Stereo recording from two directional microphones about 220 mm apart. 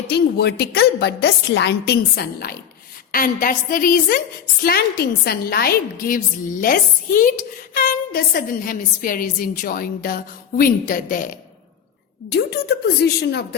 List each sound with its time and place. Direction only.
0.1 s a woman's voice: 45° left (ahead or behind)